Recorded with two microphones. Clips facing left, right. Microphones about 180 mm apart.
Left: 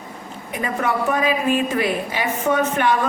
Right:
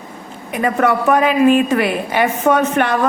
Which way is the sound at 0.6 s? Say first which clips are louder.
Right 6 dB; 70° right (ahead or behind).